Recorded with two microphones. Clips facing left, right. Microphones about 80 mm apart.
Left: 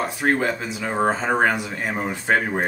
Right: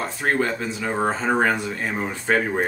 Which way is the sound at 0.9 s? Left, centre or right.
Centre.